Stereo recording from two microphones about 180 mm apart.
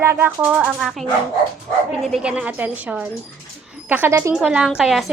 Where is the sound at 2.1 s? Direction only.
5° right (ahead or behind).